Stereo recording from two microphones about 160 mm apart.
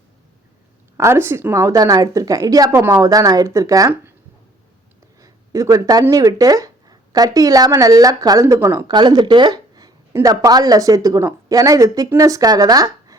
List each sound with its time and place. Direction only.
0.9 s a woman's voice: 15° right (ahead or behind)
5.2 s a woman's voice: 20° right (ahead or behind)